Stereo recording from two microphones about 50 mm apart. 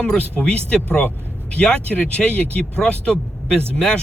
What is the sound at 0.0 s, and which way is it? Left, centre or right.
Speech, centre.